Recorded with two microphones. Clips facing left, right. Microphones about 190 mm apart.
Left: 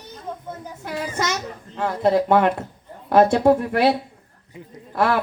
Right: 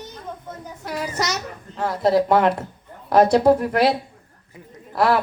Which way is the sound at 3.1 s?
40° right (ahead or behind).